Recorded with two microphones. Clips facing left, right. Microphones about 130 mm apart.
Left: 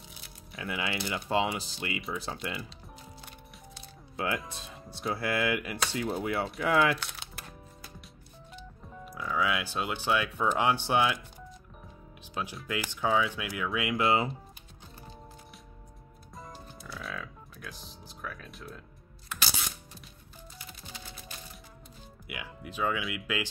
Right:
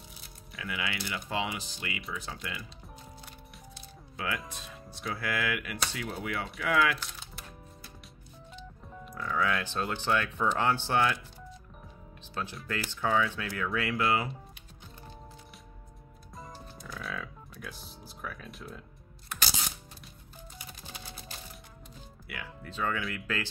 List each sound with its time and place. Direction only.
0.6 s speech: 30° left (ahead or behind)
4.5 s speech: 30° left (ahead or behind)
7.0 s music: 70° left (ahead or behind)
8.5 s speech: 5° left (ahead or behind)
12.6 s speech: 15° left (ahead or behind)
14.0 s speech: 25° left (ahead or behind)
16.3 s music: centre (ahead or behind)
22.3 s speech: 15° left (ahead or behind)